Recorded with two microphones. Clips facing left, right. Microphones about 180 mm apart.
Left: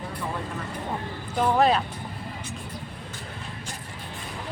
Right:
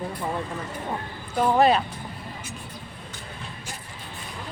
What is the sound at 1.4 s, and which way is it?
Speech, centre (ahead or behind).